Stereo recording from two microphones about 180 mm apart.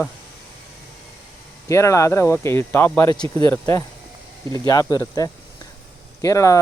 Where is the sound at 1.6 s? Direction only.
15° left (ahead or behind).